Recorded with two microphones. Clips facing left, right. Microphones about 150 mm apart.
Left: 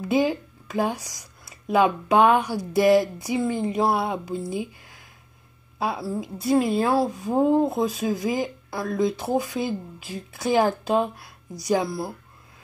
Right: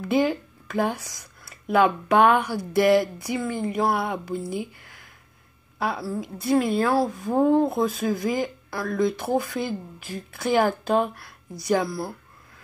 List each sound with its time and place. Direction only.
0.0 s speech: 20° left (ahead or behind)